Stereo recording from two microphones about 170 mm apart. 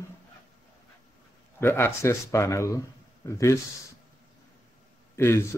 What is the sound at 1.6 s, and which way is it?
Speech, 15° left (ahead or behind).